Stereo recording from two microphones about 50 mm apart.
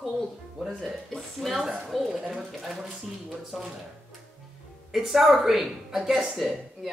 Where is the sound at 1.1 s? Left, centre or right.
Centre.